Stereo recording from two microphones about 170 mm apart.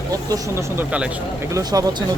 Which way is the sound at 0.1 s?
20° right (ahead or behind).